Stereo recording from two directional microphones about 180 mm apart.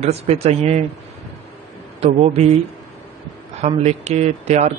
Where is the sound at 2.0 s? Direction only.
35° right (ahead or behind).